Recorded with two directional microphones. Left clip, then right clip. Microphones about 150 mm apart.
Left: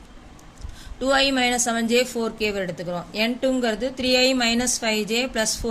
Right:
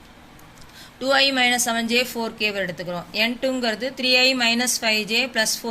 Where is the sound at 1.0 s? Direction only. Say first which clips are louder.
Right 2 dB; 50° left (ahead or behind).